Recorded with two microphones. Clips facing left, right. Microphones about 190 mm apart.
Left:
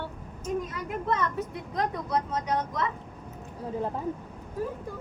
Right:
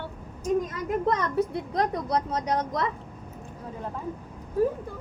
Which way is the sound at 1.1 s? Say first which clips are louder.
Right 2 dB; 35° right (ahead or behind).